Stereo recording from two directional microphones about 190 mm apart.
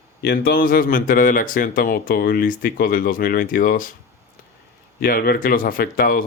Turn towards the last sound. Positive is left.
turn(degrees=50)  # may be behind; listen again after turning